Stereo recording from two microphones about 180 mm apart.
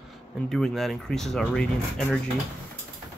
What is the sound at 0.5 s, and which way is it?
Speech, centre (ahead or behind).